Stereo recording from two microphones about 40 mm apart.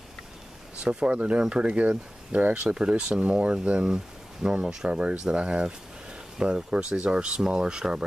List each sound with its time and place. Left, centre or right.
0.8 s speech: right
2.7 s speech: right